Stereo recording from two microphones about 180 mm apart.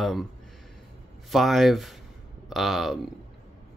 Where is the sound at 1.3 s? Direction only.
Centre (ahead or behind).